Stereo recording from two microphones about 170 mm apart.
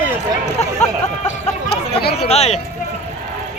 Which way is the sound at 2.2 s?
40° left (ahead or behind).